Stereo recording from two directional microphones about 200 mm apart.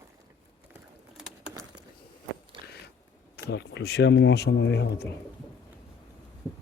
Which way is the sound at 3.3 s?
55° left (ahead or behind).